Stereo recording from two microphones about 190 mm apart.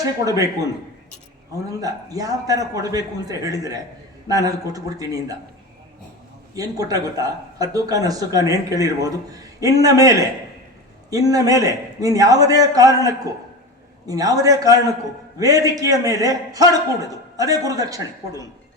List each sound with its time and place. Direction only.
0.0 s a man's voice: 20° right (ahead or behind)
1.8 s speech: 20° right (ahead or behind)
6.6 s speech: 20° right (ahead or behind)